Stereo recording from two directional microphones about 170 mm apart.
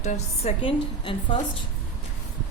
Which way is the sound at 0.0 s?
40° left (ahead or behind).